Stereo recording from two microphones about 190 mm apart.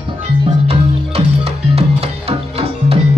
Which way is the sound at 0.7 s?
30° right (ahead or behind).